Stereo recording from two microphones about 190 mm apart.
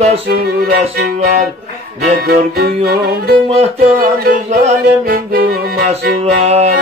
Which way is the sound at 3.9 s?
50° right (ahead or behind).